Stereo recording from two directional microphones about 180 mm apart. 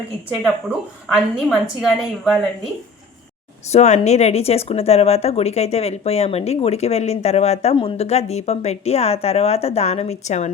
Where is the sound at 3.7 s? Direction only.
40° left (ahead or behind).